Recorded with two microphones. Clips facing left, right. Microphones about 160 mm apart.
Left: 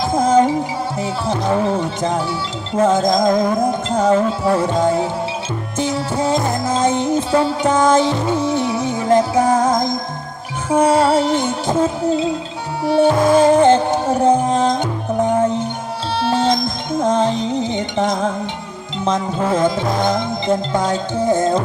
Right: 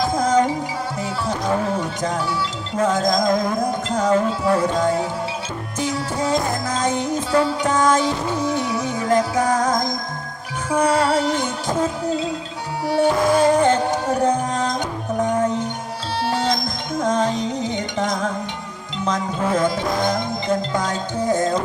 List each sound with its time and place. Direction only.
0.0 s music: 25° left (ahead or behind)